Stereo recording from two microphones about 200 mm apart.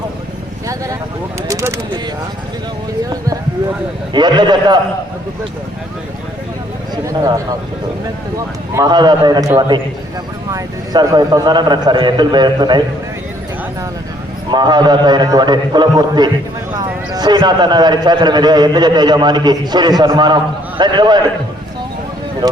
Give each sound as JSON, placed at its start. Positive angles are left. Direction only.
{"t": 1.5, "sound": "speech", "side_deg": -15}
{"t": 4.1, "sound": "a man's voice", "side_deg": -20}
{"t": 6.9, "sound": "speech", "side_deg": -15}
{"t": 8.7, "sound": "a man's voice", "side_deg": -20}
{"t": 14.5, "sound": "a man's voice", "side_deg": -20}